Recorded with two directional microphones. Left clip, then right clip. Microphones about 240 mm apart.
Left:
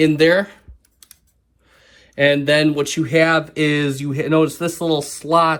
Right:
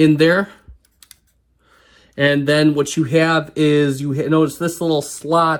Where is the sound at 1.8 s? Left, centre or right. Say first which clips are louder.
Left 1 dB; right.